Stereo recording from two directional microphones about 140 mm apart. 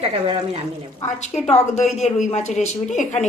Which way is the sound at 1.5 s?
50° left (ahead or behind).